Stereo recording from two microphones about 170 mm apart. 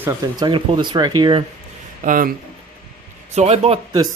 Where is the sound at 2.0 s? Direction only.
55° right (ahead or behind).